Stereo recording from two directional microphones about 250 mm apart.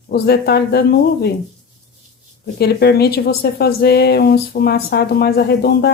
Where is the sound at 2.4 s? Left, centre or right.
Left.